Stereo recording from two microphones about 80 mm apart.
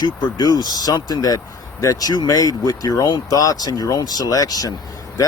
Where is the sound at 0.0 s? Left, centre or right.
Left.